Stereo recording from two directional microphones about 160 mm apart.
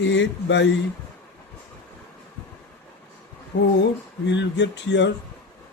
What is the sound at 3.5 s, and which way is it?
Speech, 90° left.